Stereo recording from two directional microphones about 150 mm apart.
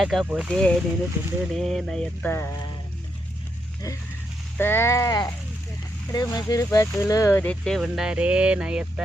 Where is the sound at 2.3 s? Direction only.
15° left (ahead or behind).